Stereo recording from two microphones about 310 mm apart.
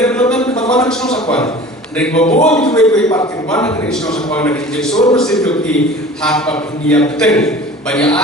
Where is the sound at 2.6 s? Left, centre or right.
Centre.